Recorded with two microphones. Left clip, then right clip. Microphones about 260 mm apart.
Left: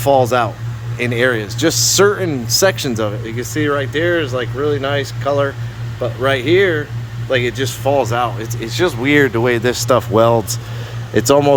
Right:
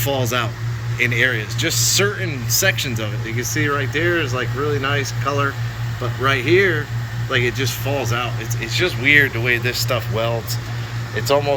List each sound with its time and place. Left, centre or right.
0.0 s speech: centre